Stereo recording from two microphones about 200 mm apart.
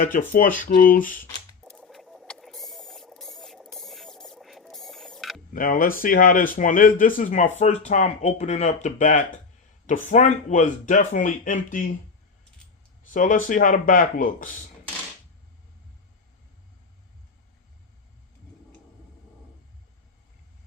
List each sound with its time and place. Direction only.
0.3 s speech: 40° left (ahead or behind)
1.6 s rodents: 5° left (ahead or behind)
5.5 s speech: 45° left (ahead or behind)
13.1 s speech: 40° left (ahead or behind)